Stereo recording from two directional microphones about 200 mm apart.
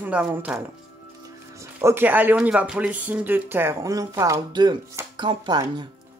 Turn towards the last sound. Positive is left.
turn(degrees=-20)  # may be behind; listen again after turning